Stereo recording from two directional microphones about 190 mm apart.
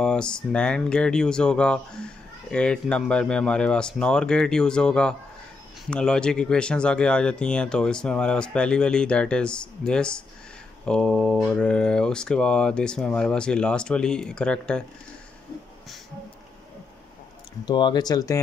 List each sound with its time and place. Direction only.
0.0 s speech: 5° left (ahead or behind)
17.6 s speech: 25° left (ahead or behind)